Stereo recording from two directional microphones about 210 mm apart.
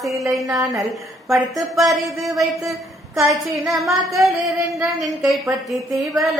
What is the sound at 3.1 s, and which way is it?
Speech, 15° right (ahead or behind).